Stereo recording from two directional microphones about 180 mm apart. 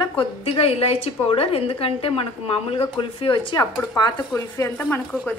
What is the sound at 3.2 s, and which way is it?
Speech, 30° left (ahead or behind).